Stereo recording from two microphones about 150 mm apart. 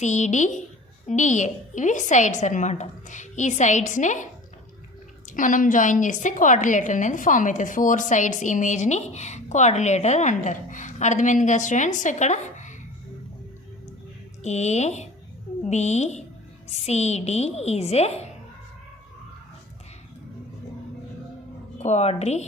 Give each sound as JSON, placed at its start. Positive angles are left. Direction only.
{"t": 0.0, "sound": "a woman's voice", "side_deg": 50}
{"t": 5.3, "sound": "a woman's voice", "side_deg": 60}
{"t": 14.4, "sound": "a woman's voice", "side_deg": 50}
{"t": 21.8, "sound": "a woman's voice", "side_deg": 45}